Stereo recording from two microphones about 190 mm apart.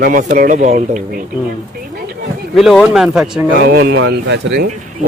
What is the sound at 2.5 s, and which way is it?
Speech, centre (ahead or behind).